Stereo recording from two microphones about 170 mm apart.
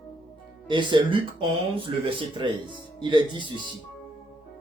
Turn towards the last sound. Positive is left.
turn(degrees=-25)  # may be behind; listen again after turning